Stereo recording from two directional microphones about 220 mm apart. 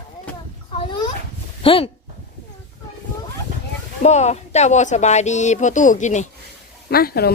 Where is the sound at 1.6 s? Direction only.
25° left (ahead or behind).